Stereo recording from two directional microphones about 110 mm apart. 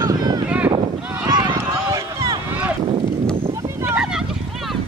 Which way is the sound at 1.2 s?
35° right (ahead or behind).